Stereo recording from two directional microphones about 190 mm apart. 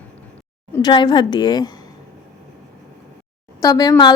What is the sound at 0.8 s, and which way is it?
Speech, 20° left (ahead or behind).